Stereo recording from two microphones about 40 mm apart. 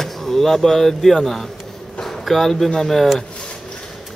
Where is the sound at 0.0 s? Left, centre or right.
Centre.